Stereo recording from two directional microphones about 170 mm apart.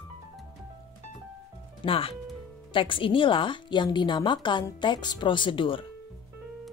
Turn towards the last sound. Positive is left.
turn(degrees=30)  # may be behind; listen again after turning